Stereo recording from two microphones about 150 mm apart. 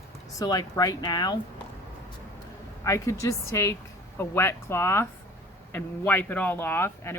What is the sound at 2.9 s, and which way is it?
Speech, 20° left (ahead or behind).